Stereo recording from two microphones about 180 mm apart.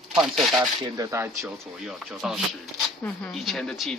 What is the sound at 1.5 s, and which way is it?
Speech, centre (ahead or behind).